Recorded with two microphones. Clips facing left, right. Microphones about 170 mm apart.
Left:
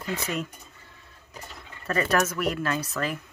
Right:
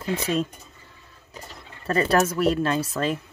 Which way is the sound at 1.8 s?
30° right (ahead or behind).